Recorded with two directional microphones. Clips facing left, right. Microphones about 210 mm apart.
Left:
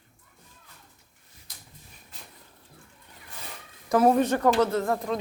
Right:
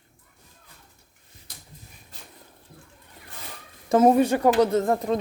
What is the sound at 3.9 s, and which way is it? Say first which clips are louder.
Speech: right 3 dB; 20° right (ahead or behind).